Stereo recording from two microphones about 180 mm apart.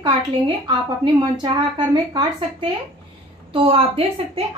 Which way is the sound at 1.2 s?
25° right (ahead or behind).